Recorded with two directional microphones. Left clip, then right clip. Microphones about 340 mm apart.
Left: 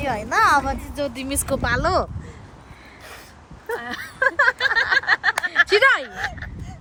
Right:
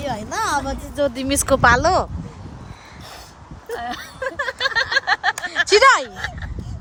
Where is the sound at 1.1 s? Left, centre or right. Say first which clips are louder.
Right 6 dB; centre.